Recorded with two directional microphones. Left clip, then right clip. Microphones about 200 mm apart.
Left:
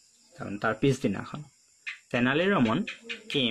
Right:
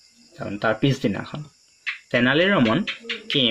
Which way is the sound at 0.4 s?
20° left (ahead or behind).